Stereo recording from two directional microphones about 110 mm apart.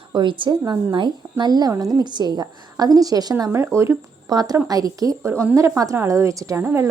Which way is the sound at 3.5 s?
25° right (ahead or behind).